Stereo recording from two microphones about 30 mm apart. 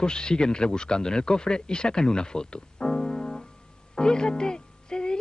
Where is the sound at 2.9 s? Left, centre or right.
Left.